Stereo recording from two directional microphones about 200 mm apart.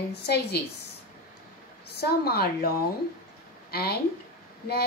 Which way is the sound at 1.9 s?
50° left (ahead or behind).